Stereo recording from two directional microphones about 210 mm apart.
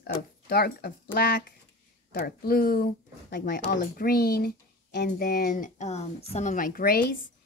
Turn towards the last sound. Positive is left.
turn(degrees=45)  # may be behind; listen again after turning